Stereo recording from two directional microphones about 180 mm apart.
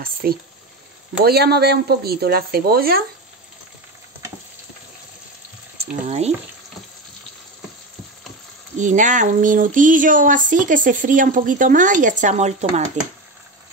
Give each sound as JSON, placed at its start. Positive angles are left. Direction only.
{"t": 0.0, "sound": "speech", "side_deg": -55}
{"t": 6.0, "sound": "frying", "side_deg": -35}
{"t": 8.7, "sound": "speech", "side_deg": -45}